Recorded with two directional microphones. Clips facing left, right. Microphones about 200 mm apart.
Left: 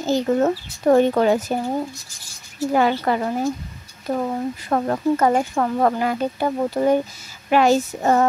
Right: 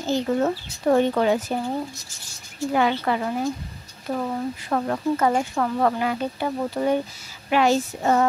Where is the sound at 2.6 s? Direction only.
40° left (ahead or behind).